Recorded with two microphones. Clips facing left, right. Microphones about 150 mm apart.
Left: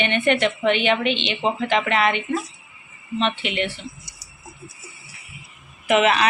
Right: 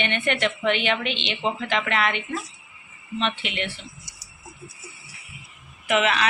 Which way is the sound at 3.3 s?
Centre (ahead or behind).